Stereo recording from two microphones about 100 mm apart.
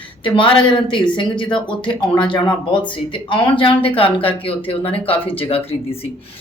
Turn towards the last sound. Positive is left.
turn(degrees=70)  # may be behind; listen again after turning